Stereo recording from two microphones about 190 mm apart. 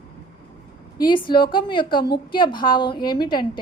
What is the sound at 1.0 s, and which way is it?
A woman's voice, 25° left (ahead or behind).